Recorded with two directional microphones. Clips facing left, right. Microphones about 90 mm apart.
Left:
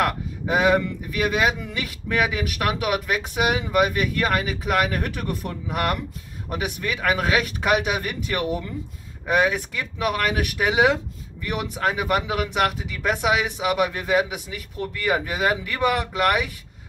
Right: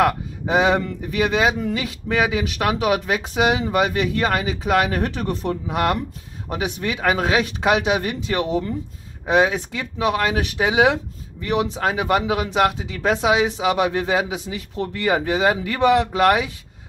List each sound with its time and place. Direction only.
0.0 s speech: 25° right (ahead or behind)